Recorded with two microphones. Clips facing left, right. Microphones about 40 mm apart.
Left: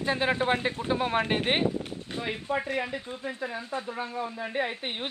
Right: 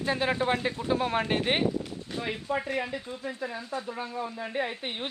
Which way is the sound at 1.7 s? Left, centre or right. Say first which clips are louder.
Even; left.